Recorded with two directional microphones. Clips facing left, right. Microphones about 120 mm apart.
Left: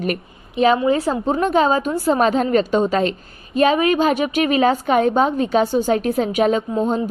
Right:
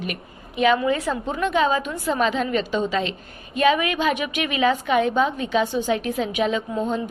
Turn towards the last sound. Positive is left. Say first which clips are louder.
# left 5 dB
turn(degrees=35)  # may be behind; listen again after turning